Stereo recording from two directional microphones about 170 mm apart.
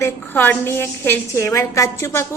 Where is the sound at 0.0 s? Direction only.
10° left (ahead or behind).